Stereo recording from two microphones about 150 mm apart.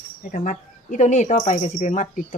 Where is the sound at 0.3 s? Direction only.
60° left (ahead or behind).